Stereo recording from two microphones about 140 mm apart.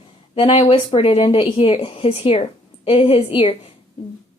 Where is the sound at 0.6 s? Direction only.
40° left (ahead or behind).